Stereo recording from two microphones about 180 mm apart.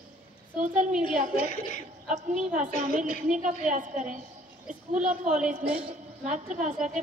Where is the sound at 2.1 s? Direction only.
40° right (ahead or behind).